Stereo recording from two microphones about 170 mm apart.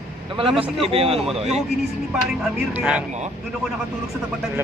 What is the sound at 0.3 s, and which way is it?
A man's voice, 30° right (ahead or behind).